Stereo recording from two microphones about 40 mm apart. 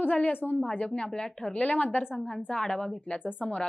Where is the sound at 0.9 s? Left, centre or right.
Left.